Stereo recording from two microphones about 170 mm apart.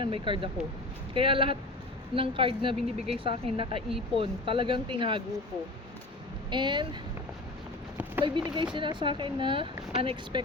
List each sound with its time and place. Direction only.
0.0 s speech: 30° right (ahead or behind)
6.5 s speech: 25° right (ahead or behind)
8.2 s speech: 30° right (ahead or behind)